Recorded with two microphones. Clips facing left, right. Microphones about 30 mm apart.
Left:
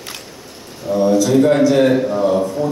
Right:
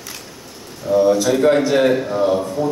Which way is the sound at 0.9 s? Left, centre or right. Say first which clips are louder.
Right 3 dB; centre.